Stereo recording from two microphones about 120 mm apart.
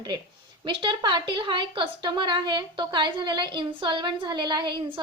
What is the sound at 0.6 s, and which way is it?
A woman's voice, 45° right (ahead or behind).